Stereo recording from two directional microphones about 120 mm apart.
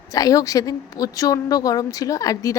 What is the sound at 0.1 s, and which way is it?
A woman's voice, 30° left (ahead or behind).